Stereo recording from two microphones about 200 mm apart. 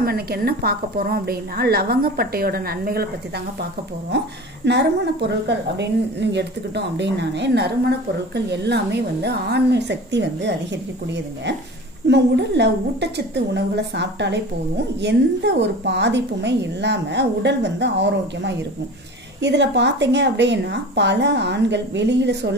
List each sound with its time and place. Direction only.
0.0 s a woman's voice: 50° right (ahead or behind)
4.1 s a woman's voice: 55° right (ahead or behind)
12.1 s a woman's voice: 60° right (ahead or behind)